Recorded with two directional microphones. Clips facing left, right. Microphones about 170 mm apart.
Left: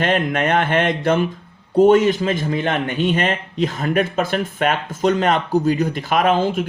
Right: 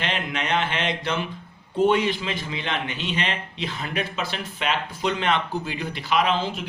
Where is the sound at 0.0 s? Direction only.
50° left (ahead or behind).